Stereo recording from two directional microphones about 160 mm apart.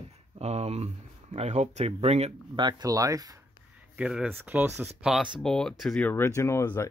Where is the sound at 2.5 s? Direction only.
25° right (ahead or behind).